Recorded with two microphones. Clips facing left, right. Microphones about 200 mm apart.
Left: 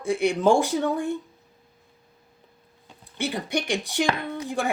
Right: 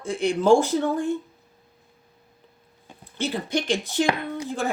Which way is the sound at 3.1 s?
15° left (ahead or behind).